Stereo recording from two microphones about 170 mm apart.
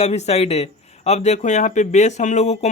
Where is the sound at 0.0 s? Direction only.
40° left (ahead or behind).